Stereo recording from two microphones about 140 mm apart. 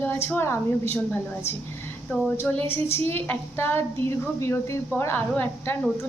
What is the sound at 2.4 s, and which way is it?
A woman's voice, 15° left (ahead or behind).